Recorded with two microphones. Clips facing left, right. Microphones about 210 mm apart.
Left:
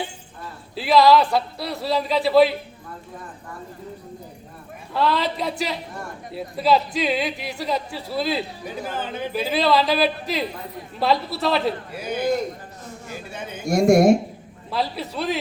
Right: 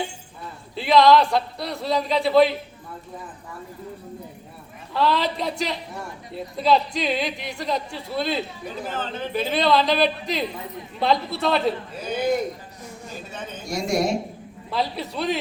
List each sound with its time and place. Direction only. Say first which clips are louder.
0.8 s a woman's voice: even; 5° left (ahead or behind)
4.9 s a woman's voice: even; centre (ahead or behind)
13.7 s a woman's voice: left 9 dB; 50° left (ahead or behind)
14.7 s a woman's voice: even; centre (ahead or behind)